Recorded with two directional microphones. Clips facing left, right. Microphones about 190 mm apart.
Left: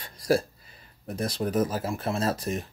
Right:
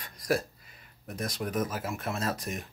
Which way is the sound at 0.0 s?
30° left (ahead or behind).